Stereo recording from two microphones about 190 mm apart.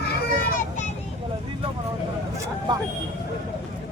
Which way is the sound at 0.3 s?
45° left (ahead or behind).